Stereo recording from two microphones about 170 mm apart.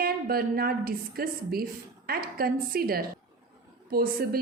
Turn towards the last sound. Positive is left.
turn(degrees=-60)  # may be behind; listen again after turning